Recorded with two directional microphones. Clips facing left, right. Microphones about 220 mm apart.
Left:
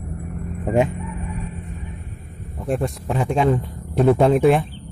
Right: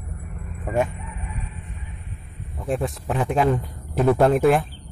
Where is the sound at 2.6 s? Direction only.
Centre (ahead or behind).